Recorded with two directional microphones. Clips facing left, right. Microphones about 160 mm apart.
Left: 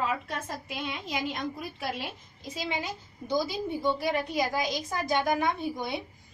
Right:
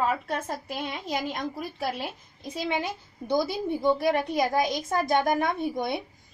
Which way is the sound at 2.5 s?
55° right (ahead or behind).